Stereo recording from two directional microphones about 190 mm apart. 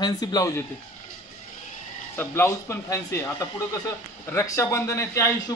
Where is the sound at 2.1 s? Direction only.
10° left (ahead or behind).